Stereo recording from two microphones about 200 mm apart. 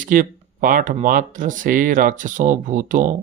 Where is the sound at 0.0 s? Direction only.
45° right (ahead or behind).